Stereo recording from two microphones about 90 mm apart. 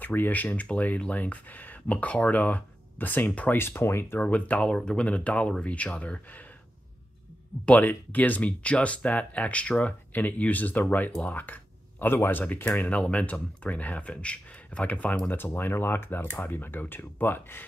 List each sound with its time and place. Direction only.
0.0 s speech: 20° left (ahead or behind)
4.2 s speech: 15° left (ahead or behind)
7.6 s speech: 20° left (ahead or behind)